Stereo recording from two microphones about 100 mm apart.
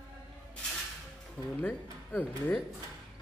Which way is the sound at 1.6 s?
15° left (ahead or behind).